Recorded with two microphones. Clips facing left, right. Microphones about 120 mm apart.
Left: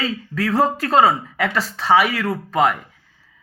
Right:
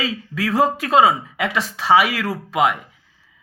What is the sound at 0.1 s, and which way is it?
Speech, 5° right (ahead or behind).